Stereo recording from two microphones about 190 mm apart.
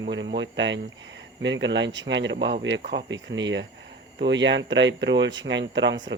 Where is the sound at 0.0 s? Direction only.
70° right (ahead or behind).